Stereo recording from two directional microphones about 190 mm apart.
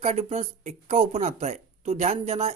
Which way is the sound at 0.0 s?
35° right (ahead or behind).